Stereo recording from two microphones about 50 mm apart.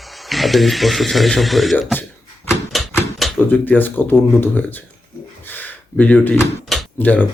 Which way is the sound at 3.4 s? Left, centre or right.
Left.